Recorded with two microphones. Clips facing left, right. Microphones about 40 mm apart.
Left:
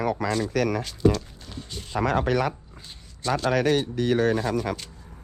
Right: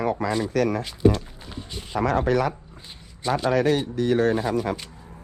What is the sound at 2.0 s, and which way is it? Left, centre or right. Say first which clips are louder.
Speech: right 2 dB; left.